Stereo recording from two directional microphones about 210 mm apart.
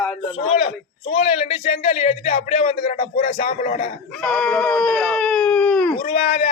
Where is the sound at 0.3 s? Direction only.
30° left (ahead or behind).